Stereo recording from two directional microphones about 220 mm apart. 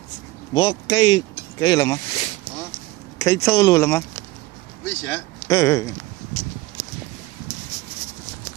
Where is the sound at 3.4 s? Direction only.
15° left (ahead or behind).